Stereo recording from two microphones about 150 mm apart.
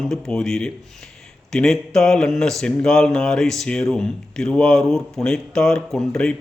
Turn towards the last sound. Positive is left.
turn(degrees=5)  # may be behind; listen again after turning